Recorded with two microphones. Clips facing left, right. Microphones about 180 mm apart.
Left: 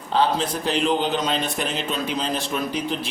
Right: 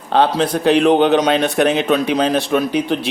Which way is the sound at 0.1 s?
70° right (ahead or behind).